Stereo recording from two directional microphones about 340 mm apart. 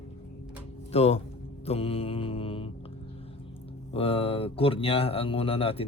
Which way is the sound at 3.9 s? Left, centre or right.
Centre.